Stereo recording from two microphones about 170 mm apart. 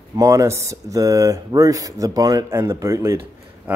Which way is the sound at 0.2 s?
20° right (ahead or behind).